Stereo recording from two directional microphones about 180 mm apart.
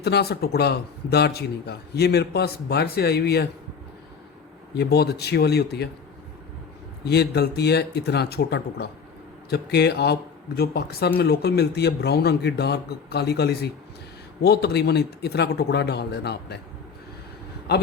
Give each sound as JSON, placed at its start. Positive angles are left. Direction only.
{"t": 0.0, "sound": "a man's voice", "side_deg": 65}
{"t": 4.7, "sound": "a man's voice", "side_deg": 65}
{"t": 7.0, "sound": "a man's voice", "side_deg": 65}
{"t": 17.7, "sound": "a man's voice", "side_deg": 65}